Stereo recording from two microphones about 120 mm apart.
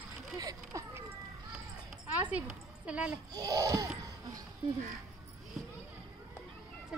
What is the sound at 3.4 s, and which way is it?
Speech, 30° right (ahead or behind).